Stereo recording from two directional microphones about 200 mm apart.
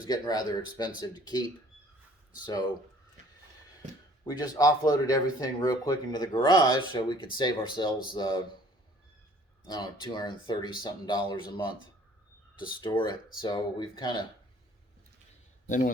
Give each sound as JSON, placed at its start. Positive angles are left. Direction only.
{"t": 0.0, "sound": "speech", "side_deg": 20}
{"t": 4.2, "sound": "speech", "side_deg": 20}
{"t": 9.6, "sound": "speech", "side_deg": 20}
{"t": 12.8, "sound": "speech", "side_deg": 20}
{"t": 15.6, "sound": "a man's voice", "side_deg": 40}